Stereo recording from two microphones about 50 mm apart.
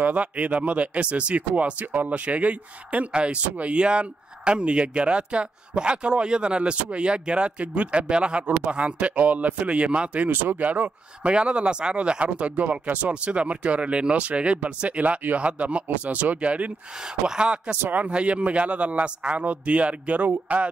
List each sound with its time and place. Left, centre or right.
0.0 s speech: right
10.3 s speech: right
10.6 s speech: right
11.3 s speech: right
17.0 s speech: centre